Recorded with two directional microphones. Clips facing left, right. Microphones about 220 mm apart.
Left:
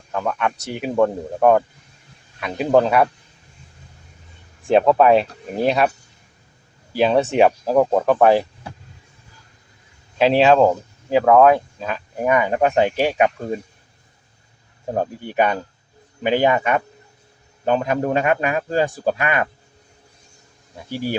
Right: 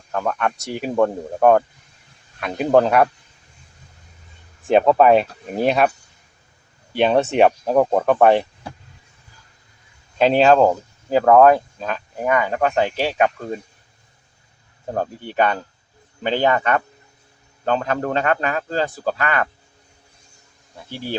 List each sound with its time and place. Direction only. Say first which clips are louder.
0.6 s speech: left 1 dB; centre (ahead or behind)
4.6 s speech: even; centre (ahead or behind)
6.9 s speech: even; centre (ahead or behind)
10.2 s speech: even; centre (ahead or behind)
12.2 s a man's voice: left 2 dB; 20° left (ahead or behind)
14.9 s a man's voice: left 1 dB; 15° left (ahead or behind)
20.9 s a man's voice: left 4 dB; 15° left (ahead or behind)